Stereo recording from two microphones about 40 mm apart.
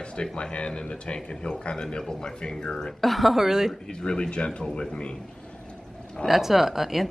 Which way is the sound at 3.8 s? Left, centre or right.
Left.